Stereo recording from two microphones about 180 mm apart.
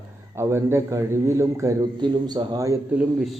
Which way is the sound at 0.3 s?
15° right (ahead or behind).